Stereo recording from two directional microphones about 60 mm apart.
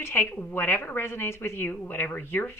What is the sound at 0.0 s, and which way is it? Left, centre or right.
A woman's voice, left.